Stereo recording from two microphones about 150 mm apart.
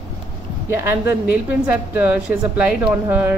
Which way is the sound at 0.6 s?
15° right (ahead or behind).